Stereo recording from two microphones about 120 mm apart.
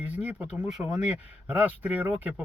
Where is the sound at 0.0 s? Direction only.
10° right (ahead or behind).